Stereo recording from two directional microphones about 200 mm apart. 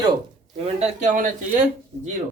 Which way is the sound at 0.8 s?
35° right (ahead or behind).